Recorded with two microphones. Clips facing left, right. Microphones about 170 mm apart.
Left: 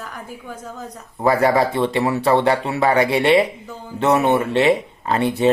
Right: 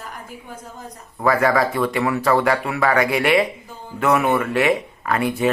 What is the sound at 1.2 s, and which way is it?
Speech, 30° left (ahead or behind).